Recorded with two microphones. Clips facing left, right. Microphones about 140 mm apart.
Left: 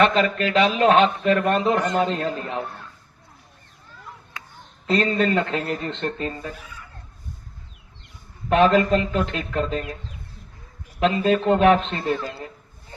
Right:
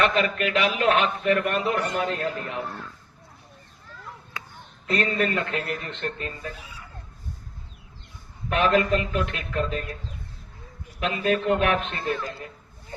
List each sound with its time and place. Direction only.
0.0 s a man's voice: 30° left (ahead or behind)
4.9 s a man's voice: 30° left (ahead or behind)
8.4 s a man's voice: 30° left (ahead or behind)
11.0 s a man's voice: 30° left (ahead or behind)